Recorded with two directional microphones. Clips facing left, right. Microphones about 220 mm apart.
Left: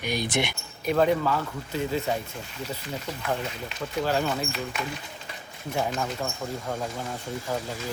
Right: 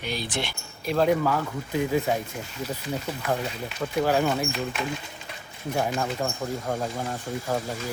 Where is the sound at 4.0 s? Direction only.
10° right (ahead or behind).